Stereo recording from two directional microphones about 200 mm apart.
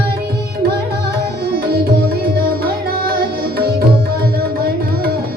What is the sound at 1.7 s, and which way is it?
Music, 50° right (ahead or behind).